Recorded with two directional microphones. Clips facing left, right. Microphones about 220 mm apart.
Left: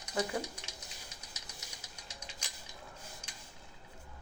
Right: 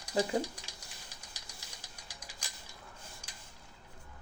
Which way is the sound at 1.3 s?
25° left (ahead or behind).